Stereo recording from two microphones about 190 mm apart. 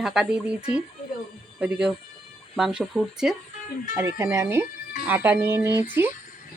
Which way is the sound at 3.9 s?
15° right (ahead or behind).